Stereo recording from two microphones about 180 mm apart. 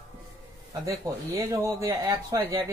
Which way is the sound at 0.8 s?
20° right (ahead or behind).